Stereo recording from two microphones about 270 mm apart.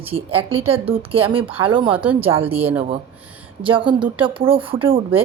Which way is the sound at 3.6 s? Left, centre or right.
Centre.